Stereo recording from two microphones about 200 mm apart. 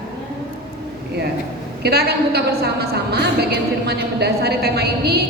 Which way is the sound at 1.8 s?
55° right (ahead or behind).